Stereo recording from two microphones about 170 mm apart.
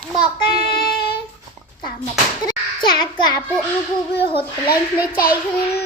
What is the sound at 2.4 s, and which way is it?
Speech, 25° left (ahead or behind).